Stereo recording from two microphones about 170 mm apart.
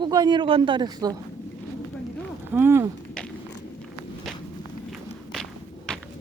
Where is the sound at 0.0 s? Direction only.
25° right (ahead or behind).